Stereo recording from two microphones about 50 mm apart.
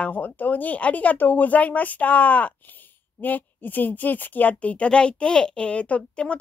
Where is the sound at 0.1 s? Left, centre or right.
Left.